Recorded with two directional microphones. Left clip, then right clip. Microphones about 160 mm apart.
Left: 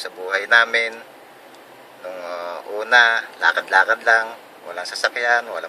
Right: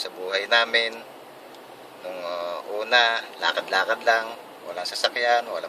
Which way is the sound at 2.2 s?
10° left (ahead or behind).